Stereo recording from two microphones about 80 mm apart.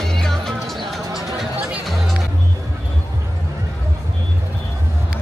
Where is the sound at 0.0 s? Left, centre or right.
Centre.